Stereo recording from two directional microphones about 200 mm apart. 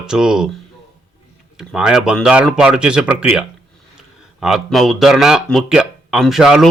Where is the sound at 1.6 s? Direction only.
5° right (ahead or behind).